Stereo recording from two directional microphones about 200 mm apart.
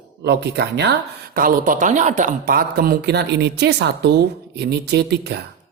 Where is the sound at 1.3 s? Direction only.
45° right (ahead or behind).